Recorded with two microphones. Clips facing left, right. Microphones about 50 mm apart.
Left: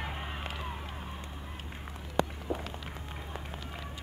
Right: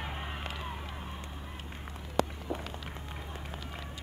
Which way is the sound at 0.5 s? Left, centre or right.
Centre.